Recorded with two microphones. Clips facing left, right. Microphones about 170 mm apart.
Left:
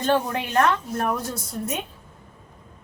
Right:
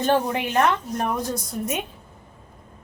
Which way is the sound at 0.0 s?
15° right (ahead or behind).